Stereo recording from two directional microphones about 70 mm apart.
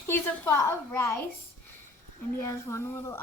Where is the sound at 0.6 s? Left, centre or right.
Left.